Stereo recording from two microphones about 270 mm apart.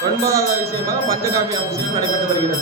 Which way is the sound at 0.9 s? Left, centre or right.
Centre.